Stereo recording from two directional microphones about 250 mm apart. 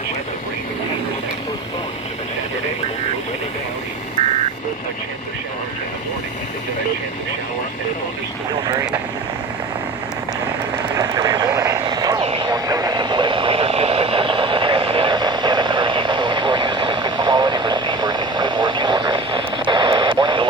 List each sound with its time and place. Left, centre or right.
10.9 s vehicle: centre